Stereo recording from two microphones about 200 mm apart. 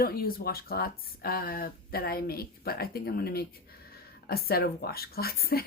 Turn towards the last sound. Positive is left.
turn(degrees=50)  # may be behind; listen again after turning